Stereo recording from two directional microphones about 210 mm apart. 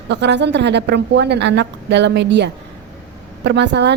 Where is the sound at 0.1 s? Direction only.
55° right (ahead or behind).